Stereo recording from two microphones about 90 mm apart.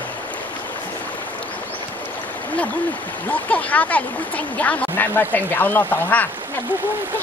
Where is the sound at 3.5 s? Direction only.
15° left (ahead or behind).